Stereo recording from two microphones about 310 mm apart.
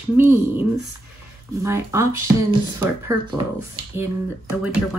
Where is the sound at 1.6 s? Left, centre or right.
Centre.